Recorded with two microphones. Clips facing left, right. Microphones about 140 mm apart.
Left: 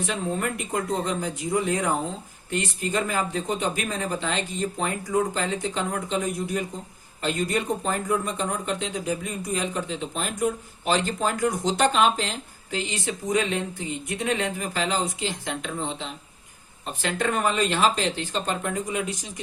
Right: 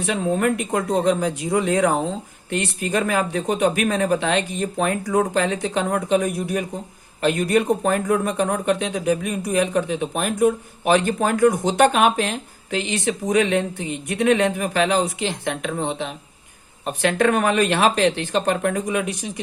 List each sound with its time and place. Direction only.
0.0 s speech: 70° right (ahead or behind)